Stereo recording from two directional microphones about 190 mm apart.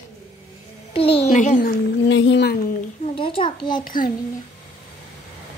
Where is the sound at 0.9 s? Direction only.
30° left (ahead or behind).